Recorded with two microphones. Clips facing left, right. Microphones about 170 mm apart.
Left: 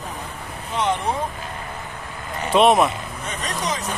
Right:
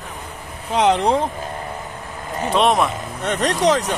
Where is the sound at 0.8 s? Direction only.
90° right.